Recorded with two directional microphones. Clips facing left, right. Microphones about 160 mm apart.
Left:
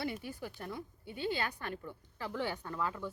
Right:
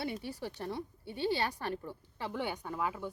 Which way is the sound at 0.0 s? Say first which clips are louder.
Right 1 dB; 30° right (ahead or behind).